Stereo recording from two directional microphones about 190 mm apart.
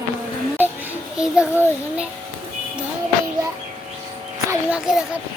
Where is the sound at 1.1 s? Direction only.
5° right (ahead or behind).